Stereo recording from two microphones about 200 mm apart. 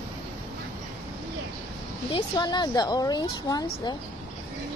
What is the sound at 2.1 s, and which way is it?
A woman's voice, 20° left (ahead or behind).